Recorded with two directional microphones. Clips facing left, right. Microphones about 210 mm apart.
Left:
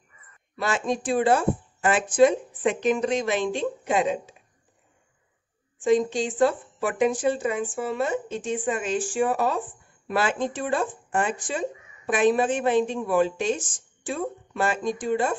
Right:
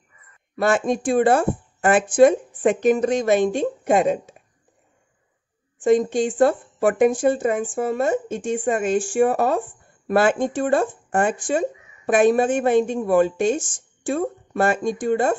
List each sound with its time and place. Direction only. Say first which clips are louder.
0.6 s speech: right 6 dB; 50° right (ahead or behind)
5.9 s speech: right 4 dB; 50° right (ahead or behind)